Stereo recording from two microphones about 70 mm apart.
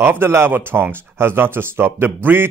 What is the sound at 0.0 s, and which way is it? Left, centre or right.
Speech, right.